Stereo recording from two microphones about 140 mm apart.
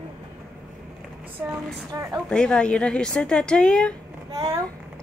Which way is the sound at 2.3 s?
5° left (ahead or behind).